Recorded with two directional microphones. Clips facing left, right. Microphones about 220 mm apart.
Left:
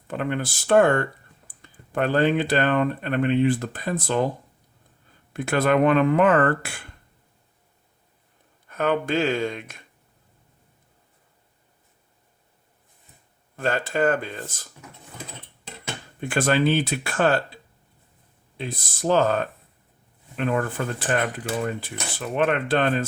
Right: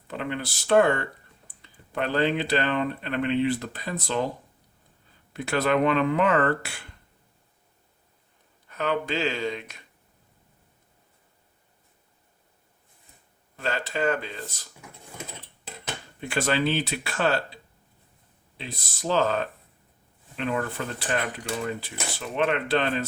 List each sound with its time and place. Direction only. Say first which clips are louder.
0.1 s speech: left 4 dB; 50° left (ahead or behind)
5.3 s speech: left 3 dB; 50° left (ahead or behind)
8.7 s speech: left 4 dB; 50° left (ahead or behind)
13.6 s speech: left 5 dB; 50° left (ahead or behind)
16.2 s speech: left 4 dB; 50° left (ahead or behind)